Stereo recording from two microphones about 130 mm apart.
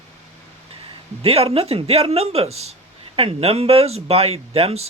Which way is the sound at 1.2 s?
50° right (ahead or behind).